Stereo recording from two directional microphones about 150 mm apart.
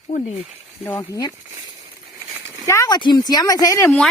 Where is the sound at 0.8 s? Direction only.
20° left (ahead or behind).